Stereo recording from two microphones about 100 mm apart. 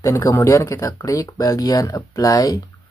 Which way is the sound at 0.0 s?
35° left (ahead or behind).